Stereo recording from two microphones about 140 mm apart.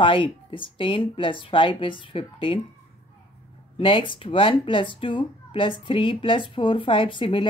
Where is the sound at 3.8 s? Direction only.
40° left (ahead or behind).